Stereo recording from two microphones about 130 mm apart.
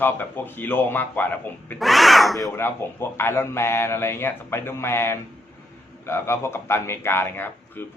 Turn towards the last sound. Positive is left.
turn(degrees=15)  # may be behind; listen again after turning